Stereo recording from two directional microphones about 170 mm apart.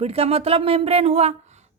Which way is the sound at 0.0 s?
35° right (ahead or behind).